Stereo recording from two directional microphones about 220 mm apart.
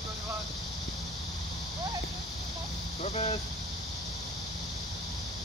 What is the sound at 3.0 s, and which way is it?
Speech, 30° left (ahead or behind).